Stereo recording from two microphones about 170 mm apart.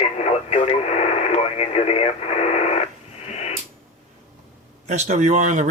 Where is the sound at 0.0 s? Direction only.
40° left (ahead or behind).